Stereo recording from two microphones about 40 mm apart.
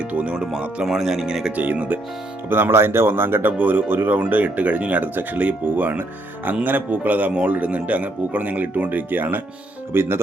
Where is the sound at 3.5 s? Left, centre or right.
Right.